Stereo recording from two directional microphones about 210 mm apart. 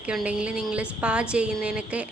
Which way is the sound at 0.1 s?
5° right (ahead or behind).